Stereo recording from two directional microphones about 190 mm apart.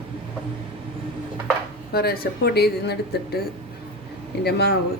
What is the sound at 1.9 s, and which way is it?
Speech, 55° left (ahead or behind).